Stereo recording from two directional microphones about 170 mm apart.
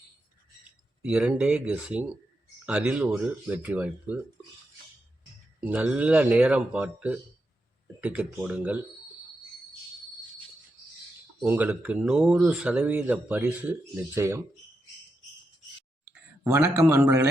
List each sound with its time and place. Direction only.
1.0 s speech: 5° right (ahead or behind)
5.5 s speech: 10° right (ahead or behind)
11.4 s speech: 10° right (ahead or behind)
16.0 s speech: 15° right (ahead or behind)